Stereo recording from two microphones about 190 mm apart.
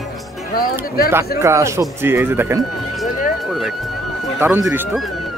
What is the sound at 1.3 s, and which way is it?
Speech, 15° right (ahead or behind).